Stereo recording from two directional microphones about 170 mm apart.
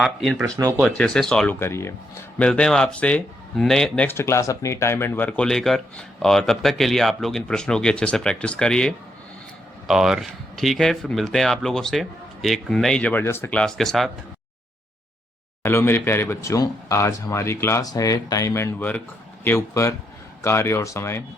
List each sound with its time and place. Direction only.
0.0 s speech: centre (ahead or behind)
0.4 s speech: 20° right (ahead or behind)
0.8 s speech: 5° left (ahead or behind)
15.6 s speech: 15° left (ahead or behind)